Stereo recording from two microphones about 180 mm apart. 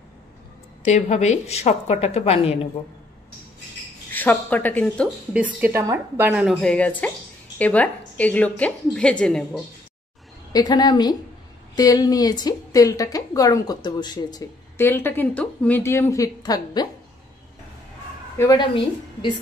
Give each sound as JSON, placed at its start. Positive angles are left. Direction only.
{"t": 0.8, "sound": "a woman's voice", "side_deg": 40}
{"t": 4.1, "sound": "a woman's voice", "side_deg": 10}
{"t": 5.3, "sound": "a woman's voice", "side_deg": -10}
{"t": 10.5, "sound": "a woman's voice", "side_deg": 20}
{"t": 14.8, "sound": "a woman's voice", "side_deg": 10}